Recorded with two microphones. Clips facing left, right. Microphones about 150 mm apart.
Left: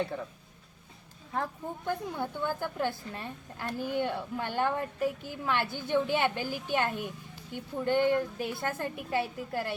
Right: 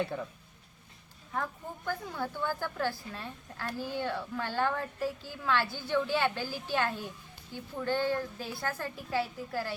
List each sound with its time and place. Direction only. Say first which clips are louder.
0.0 s speech: even; centre (ahead or behind)
1.3 s a woman's voice: left 2 dB; 30° left (ahead or behind)